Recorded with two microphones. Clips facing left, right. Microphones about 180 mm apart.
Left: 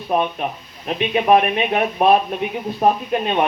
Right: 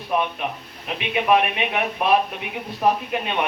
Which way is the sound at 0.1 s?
40° left (ahead or behind).